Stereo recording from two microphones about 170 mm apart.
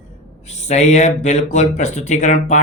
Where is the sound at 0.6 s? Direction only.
45° left (ahead or behind).